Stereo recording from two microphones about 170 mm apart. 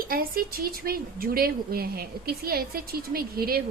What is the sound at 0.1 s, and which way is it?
A woman's voice, 60° right (ahead or behind).